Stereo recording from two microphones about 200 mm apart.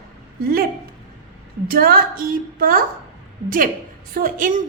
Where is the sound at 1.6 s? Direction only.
50° right (ahead or behind).